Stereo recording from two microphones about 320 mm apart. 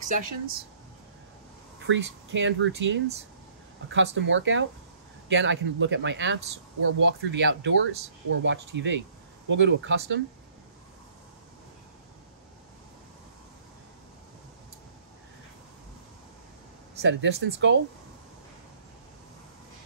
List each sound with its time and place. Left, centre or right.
0.0 s speech: right
1.9 s speech: right
17.0 s speech: right